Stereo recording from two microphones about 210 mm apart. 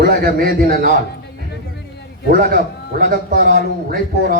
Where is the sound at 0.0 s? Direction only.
50° right (ahead or behind).